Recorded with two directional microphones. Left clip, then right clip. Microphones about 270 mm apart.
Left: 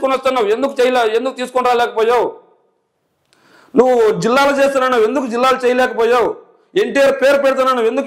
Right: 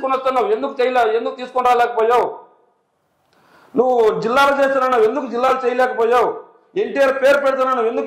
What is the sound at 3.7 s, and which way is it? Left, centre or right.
A man's voice, left.